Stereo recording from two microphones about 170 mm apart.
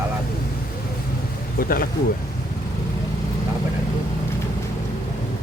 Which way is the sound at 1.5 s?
60° left (ahead or behind).